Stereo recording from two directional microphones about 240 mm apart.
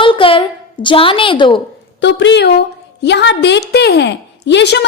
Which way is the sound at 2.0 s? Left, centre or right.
Left.